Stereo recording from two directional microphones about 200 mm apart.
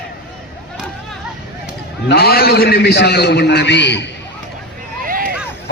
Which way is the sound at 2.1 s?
50° left (ahead or behind).